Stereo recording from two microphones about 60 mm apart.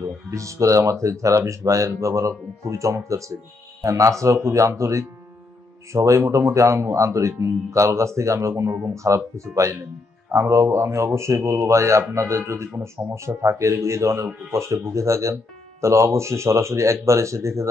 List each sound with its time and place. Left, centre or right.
0.0 s speech: right